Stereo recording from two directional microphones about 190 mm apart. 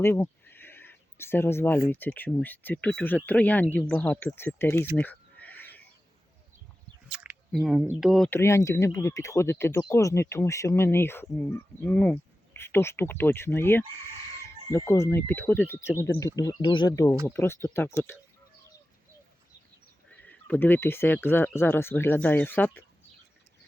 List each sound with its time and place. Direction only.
0.0 s a sound: 10° left (ahead or behind)
1.9 s speech: 10° left (ahead or behind)
4.9 s a sound: 10° left (ahead or behind)
7.1 s squish: 5° right (ahead or behind)
7.9 s speech: centre (ahead or behind)
8.3 s speech: 15° left (ahead or behind)
20.1 s speech: 10° left (ahead or behind)